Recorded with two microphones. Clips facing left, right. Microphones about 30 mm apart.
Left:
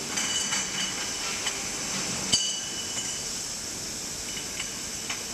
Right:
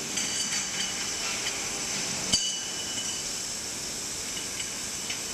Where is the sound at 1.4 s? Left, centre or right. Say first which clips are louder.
Even; centre.